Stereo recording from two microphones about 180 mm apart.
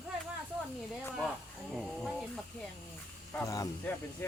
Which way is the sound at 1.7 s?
Centre (ahead or behind).